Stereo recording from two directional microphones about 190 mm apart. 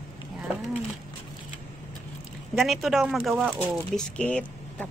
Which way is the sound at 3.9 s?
5° left (ahead or behind).